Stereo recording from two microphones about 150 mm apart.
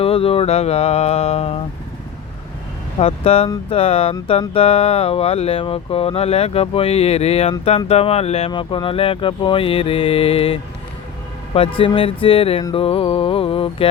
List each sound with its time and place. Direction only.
0.0 s a sound: 40° left (ahead or behind)
3.0 s speech: 40° left (ahead or behind)
11.8 s speech: 35° left (ahead or behind)